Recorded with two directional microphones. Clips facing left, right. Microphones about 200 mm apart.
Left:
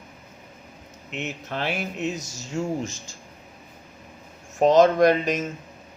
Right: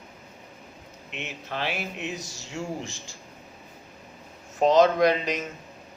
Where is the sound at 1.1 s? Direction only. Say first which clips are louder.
Left 4 dB; 45° left (ahead or behind).